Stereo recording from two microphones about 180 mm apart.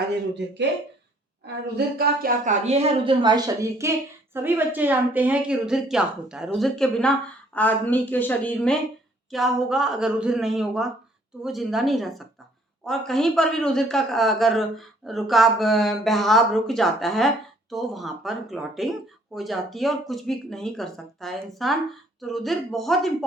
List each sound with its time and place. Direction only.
0.3 s speech: 75° right (ahead or behind)
1.6 s a man's voice: 60° right (ahead or behind); by 23.1 s centre (ahead or behind)